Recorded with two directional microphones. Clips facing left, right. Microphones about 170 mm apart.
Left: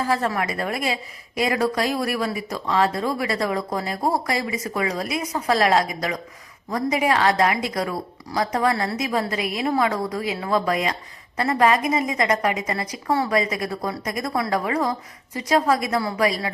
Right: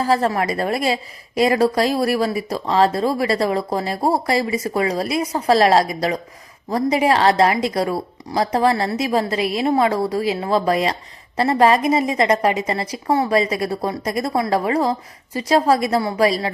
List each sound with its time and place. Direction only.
0.0 s a woman's voice: 35° right (ahead or behind)